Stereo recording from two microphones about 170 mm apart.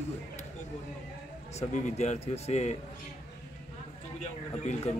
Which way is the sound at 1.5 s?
40° left (ahead or behind).